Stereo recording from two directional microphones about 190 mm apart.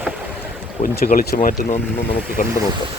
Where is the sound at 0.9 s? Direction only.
55° left (ahead or behind).